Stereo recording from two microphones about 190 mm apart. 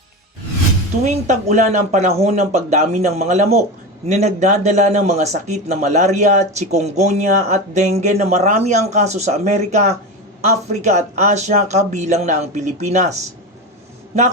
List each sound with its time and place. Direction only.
1.0 s a man's voice: 40° right (ahead or behind)